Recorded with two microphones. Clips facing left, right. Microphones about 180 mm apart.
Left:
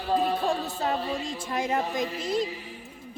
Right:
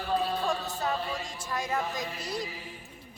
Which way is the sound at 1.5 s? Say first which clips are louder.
Left 4 dB; 25° left (ahead or behind).